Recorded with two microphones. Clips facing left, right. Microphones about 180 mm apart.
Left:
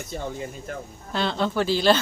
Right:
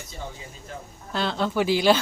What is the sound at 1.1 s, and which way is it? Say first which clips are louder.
Speech: left 1 dB; 5° right (ahead or behind).